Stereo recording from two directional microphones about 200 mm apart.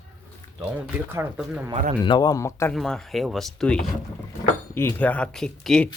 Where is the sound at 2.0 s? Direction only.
20° left (ahead or behind).